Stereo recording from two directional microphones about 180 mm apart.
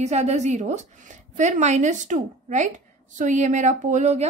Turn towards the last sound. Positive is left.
turn(degrees=-40)  # may be behind; listen again after turning